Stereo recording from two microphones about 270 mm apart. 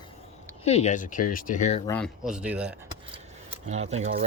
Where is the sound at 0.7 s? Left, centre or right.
Left.